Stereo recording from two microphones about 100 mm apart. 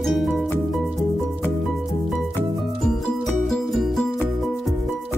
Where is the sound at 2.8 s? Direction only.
5° left (ahead or behind).